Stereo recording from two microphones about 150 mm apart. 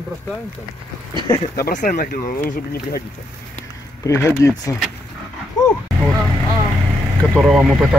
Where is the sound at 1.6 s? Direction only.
65° left (ahead or behind).